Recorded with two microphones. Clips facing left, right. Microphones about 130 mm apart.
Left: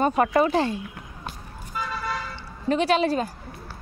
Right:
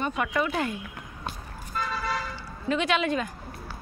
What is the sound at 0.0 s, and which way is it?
Speech, 40° left (ahead or behind).